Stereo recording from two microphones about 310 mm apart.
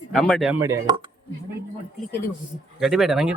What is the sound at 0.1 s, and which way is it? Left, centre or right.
Speech, centre.